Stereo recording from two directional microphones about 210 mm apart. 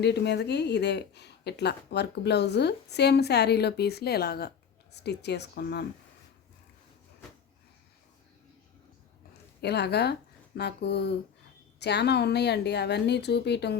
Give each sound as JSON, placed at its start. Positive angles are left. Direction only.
{"t": 0.0, "sound": "speech", "side_deg": 55}
{"t": 9.6, "sound": "speech", "side_deg": 50}